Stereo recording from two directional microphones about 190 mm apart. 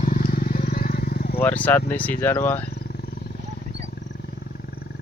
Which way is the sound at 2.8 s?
55° left (ahead or behind).